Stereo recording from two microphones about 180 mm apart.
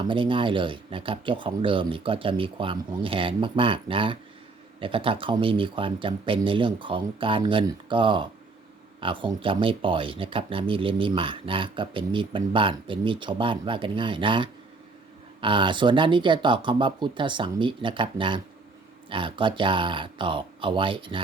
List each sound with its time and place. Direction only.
0.1 s speech: 30° right (ahead or behind)